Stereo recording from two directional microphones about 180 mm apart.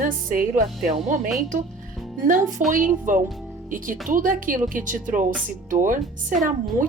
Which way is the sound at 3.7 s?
45° right (ahead or behind).